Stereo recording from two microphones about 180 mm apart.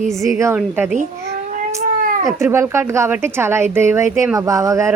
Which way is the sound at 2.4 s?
15° right (ahead or behind).